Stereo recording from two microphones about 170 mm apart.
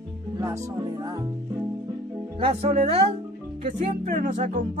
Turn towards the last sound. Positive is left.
turn(degrees=-50)  # may be behind; listen again after turning